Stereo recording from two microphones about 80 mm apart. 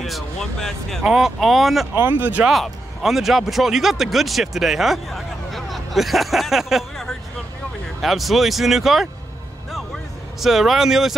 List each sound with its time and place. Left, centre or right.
0.0 s speech: centre
2.0 s speech: right
2.4 s speech: centre
10.4 s speech: centre